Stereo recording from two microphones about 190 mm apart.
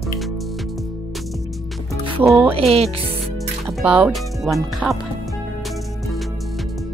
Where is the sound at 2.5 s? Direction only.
30° right (ahead or behind).